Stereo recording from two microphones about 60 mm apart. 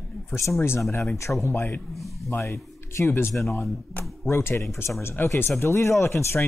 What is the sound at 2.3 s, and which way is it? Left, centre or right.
Speech, left.